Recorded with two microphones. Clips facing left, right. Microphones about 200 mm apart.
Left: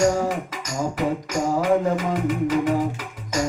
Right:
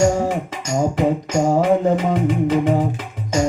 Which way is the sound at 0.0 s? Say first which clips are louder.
Right 3 dB; 25° right (ahead or behind).